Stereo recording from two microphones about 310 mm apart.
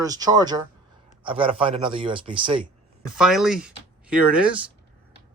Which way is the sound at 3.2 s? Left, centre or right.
Centre.